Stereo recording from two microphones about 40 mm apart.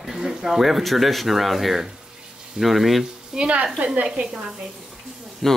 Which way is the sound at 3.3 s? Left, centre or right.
Right.